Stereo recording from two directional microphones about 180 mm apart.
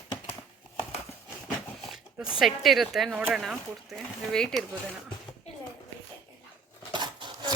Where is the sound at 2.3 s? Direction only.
Centre (ahead or behind).